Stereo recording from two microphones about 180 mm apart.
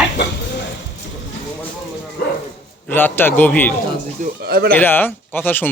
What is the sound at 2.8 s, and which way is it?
Speech, 10° left (ahead or behind).